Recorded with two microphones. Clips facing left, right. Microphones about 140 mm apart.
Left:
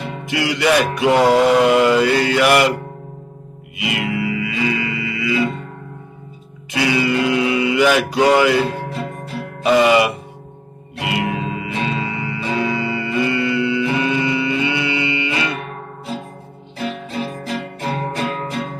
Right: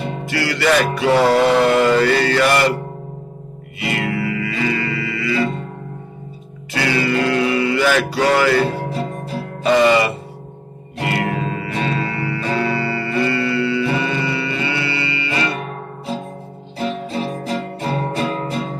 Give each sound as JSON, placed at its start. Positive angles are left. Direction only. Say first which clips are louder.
{"t": 0.2, "sound": "music", "louder": "left 2 dB", "side_deg": 20}
{"t": 3.7, "sound": "music", "louder": "even", "side_deg": 10}
{"t": 6.7, "sound": "music", "louder": "left 1 dB", "side_deg": 15}
{"t": 16.7, "sound": "music", "louder": "right 2 dB", "side_deg": -40}